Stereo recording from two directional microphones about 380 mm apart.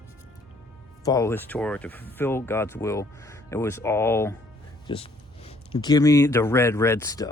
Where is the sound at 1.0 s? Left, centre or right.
Centre.